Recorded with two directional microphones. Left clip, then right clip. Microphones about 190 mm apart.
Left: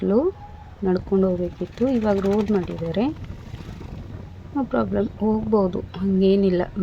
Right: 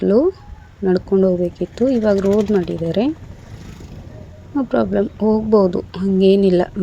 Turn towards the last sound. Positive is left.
turn(degrees=-20)  # may be behind; listen again after turning